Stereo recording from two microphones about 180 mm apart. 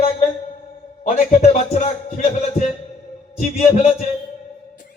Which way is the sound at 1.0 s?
50° left (ahead or behind).